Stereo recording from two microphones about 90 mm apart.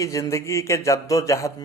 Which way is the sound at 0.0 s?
35° left (ahead or behind).